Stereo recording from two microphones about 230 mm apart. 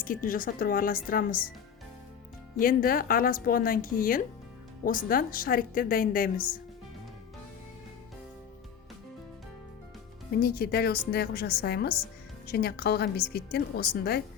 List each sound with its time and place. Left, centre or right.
0.0 s speech: left
2.6 s speech: left
10.4 s a woman's voice: left